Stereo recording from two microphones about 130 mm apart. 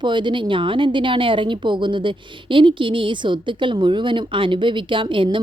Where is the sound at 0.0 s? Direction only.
35° right (ahead or behind).